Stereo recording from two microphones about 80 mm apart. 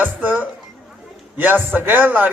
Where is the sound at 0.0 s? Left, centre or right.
Right.